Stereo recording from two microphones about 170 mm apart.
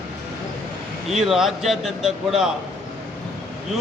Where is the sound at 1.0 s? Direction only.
Centre (ahead or behind).